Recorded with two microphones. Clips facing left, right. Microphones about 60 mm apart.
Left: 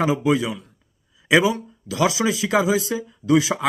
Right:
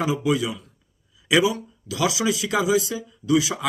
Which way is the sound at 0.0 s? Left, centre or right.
Left.